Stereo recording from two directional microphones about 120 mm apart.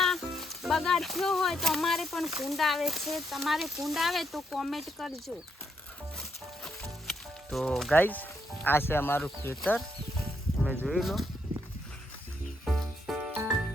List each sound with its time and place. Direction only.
0.0 s speech: centre (ahead or behind)
6.8 s music: 5° left (ahead or behind)
7.9 s speech: 15° left (ahead or behind)
10.8 s speech: centre (ahead or behind)
12.6 s music: centre (ahead or behind)